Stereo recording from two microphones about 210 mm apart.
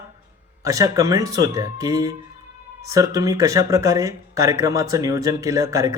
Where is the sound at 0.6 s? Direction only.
15° right (ahead or behind).